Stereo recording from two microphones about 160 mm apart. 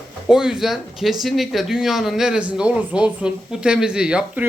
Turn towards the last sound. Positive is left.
turn(degrees=-5)  # may be behind; listen again after turning